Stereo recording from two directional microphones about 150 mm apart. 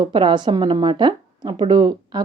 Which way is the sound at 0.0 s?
30° right (ahead or behind).